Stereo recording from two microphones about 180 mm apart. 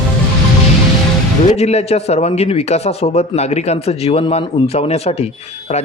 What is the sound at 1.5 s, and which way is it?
A man's voice, 35° left (ahead or behind).